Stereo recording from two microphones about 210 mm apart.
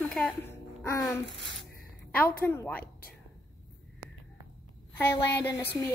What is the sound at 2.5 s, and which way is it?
Speech, 10° left (ahead or behind).